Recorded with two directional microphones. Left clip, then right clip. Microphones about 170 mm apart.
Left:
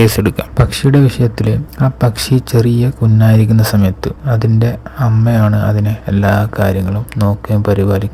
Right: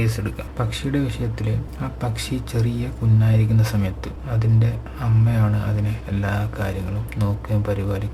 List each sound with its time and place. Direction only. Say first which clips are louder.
0.0 s speech: left 15 dB; 50° left (ahead or behind)